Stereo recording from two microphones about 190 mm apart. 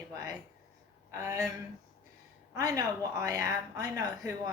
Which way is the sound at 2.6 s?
20° right (ahead or behind).